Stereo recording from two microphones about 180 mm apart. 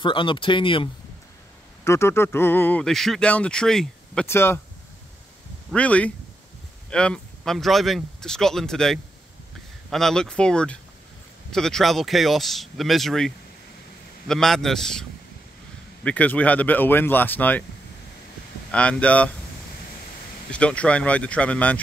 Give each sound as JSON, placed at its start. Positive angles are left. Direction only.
{"t": 0.0, "sound": "speech", "side_deg": 30}
{"t": 1.9, "sound": "speech", "side_deg": 15}
{"t": 5.7, "sound": "speech", "side_deg": 5}
{"t": 18.7, "sound": "speech", "side_deg": 5}
{"t": 20.5, "sound": "speech", "side_deg": 5}